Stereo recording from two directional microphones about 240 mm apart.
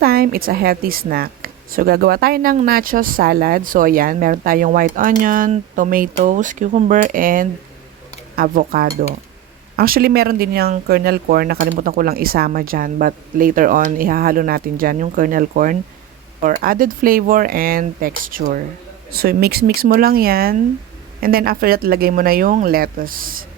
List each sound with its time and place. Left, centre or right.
0.0 s a woman's voice: right